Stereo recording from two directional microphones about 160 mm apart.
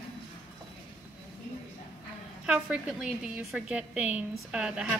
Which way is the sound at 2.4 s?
5° right (ahead or behind).